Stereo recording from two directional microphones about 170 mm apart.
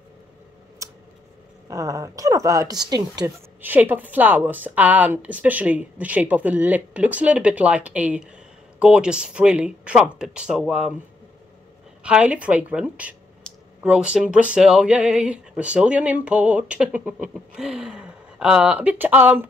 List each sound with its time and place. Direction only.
1.7 s speech: 20° right (ahead or behind)
3.6 s speech: 10° right (ahead or behind)
12.0 s speech: 5° right (ahead or behind)